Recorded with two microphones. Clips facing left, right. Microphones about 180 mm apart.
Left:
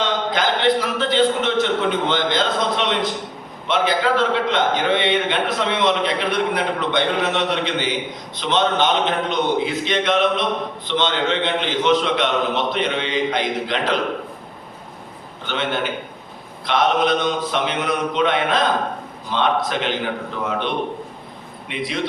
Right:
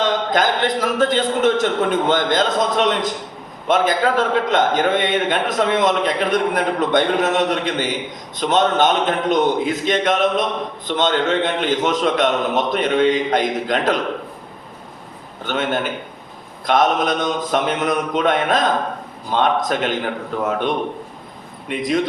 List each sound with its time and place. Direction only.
0.0 s a man's voice: 45° right (ahead or behind)
15.4 s a man's voice: 45° right (ahead or behind)